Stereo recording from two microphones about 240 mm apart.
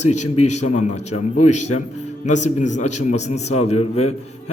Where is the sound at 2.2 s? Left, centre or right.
Left.